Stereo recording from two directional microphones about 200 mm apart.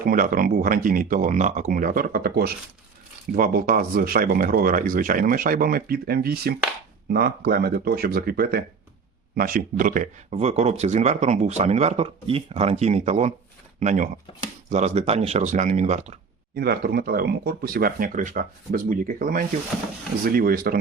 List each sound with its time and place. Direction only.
0.0 s speech: 45° right (ahead or behind)
16.6 s speech: 50° right (ahead or behind)